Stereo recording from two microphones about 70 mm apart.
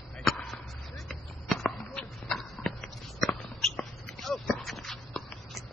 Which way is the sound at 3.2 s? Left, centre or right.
Centre.